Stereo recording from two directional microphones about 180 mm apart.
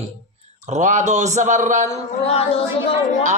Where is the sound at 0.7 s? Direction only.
40° right (ahead or behind).